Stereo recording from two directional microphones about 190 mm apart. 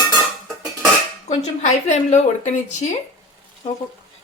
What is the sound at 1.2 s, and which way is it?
Speech, 40° left (ahead or behind).